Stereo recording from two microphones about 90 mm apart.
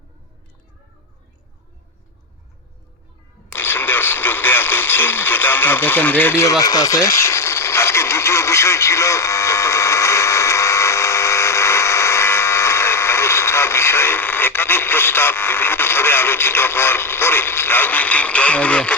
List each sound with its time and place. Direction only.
3.5 s radio: 25° left (ahead or behind)
6.4 s radio: 40° left (ahead or behind); by 18.9 s 15° left (ahead or behind)